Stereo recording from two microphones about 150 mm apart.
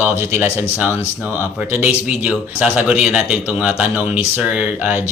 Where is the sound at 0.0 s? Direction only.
15° right (ahead or behind).